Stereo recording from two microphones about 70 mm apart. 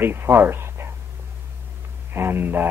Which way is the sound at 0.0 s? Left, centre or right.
Right.